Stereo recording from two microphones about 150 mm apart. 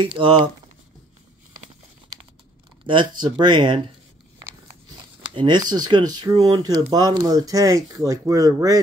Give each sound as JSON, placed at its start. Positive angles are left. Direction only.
{"t": 0.0, "sound": "speech", "side_deg": -35}
{"t": 2.9, "sound": "speech", "side_deg": -30}
{"t": 5.3, "sound": "speech", "side_deg": -30}